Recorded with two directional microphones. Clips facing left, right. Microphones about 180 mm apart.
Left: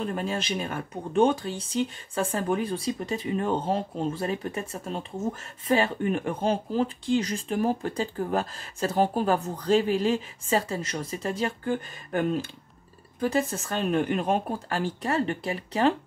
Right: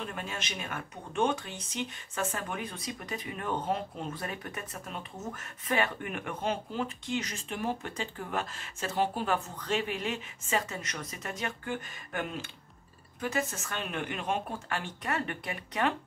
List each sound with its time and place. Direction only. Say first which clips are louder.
0.0 s speech: left 9 dB; 35° left (ahead or behind)